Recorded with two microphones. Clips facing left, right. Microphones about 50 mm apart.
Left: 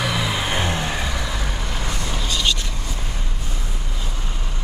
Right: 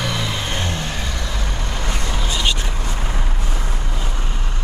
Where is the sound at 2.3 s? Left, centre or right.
Right.